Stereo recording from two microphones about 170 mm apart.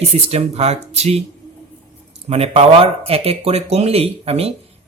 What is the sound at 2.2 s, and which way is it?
Speech, 35° right (ahead or behind).